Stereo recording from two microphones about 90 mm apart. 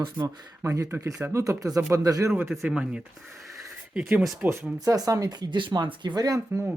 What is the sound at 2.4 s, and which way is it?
Speech, centre (ahead or behind).